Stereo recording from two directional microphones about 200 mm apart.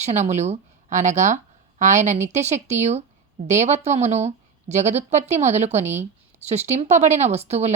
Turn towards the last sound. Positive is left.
turn(degrees=-35)  # may be behind; listen again after turning